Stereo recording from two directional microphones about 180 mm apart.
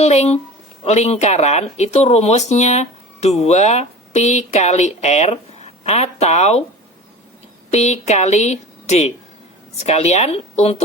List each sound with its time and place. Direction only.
0.0 s speech: 35° left (ahead or behind)
7.7 s speech: 40° left (ahead or behind)